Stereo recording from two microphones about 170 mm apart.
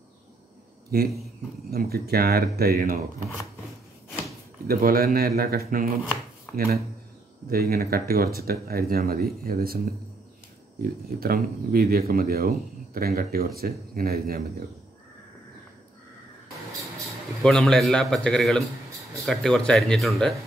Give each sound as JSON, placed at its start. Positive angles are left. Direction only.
{"t": 0.9, "sound": "speech", "side_deg": -60}
{"t": 4.6, "sound": "speech", "side_deg": -60}
{"t": 17.4, "sound": "a man's voice", "side_deg": 5}